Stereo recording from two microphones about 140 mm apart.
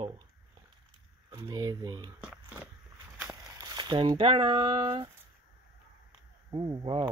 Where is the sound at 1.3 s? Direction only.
25° right (ahead or behind).